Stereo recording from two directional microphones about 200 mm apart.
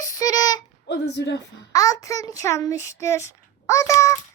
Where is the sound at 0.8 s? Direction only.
60° left (ahead or behind).